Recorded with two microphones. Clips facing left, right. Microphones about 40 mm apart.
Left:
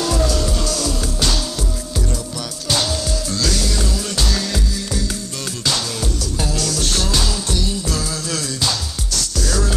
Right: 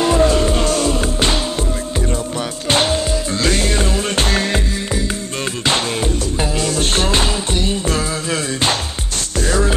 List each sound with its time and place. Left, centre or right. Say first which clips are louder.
0.0 s music: right 6 dB; right
2.7 s music: right 5 dB; right
6.6 s music: right 5 dB; right